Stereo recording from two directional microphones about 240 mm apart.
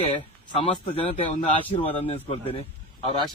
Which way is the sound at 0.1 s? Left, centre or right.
Left.